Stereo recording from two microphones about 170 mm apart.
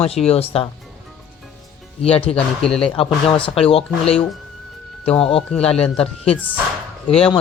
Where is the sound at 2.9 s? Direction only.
35° left (ahead or behind).